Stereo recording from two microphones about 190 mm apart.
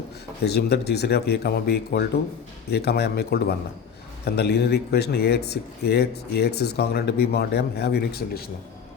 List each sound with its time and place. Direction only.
0.4 s speech: 60° left (ahead or behind)